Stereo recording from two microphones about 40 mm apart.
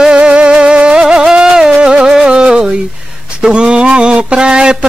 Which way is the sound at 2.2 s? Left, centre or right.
Right.